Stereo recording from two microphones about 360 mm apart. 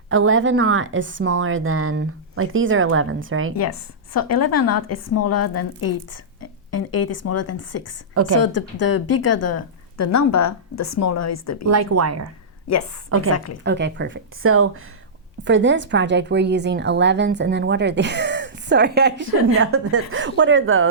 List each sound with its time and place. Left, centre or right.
0.1 s speech: right
4.2 s a woman's voice: left
11.7 s speech: right
12.6 s a woman's voice: left
13.1 s speech: right
13.3 s a woman's voice: left
13.7 s a woman's voice: right